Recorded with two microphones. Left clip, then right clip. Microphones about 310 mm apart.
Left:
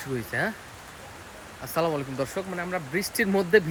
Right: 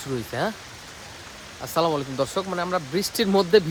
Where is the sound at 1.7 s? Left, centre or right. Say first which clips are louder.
Right 4 dB; centre.